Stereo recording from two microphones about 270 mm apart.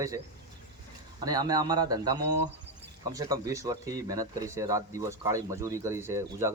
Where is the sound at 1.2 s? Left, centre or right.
Centre.